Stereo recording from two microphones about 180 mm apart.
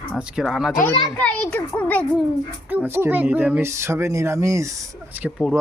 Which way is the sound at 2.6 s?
10° right (ahead or behind).